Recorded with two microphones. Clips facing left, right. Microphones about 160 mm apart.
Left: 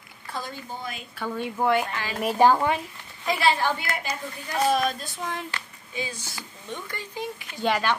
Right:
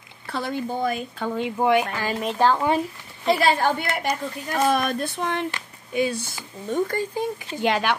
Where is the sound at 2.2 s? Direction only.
10° left (ahead or behind).